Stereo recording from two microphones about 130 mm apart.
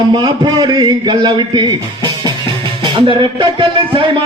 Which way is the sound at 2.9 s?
40° right (ahead or behind).